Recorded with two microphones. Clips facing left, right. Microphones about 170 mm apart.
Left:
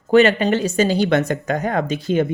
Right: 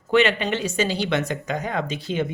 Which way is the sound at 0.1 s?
40° left (ahead or behind).